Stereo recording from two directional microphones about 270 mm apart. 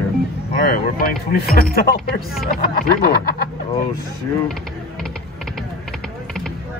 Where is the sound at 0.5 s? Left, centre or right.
Left.